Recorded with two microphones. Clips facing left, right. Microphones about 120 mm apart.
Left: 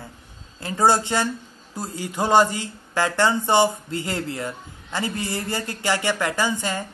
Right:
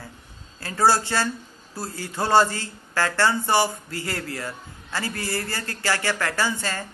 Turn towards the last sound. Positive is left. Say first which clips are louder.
# left 2 dB
turn(degrees=15)  # may be behind; listen again after turning